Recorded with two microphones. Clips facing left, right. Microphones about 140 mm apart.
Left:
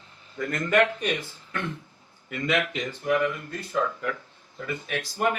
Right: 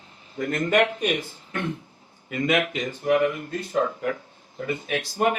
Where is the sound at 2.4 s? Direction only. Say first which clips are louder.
Right 3 dB; 50° right (ahead or behind).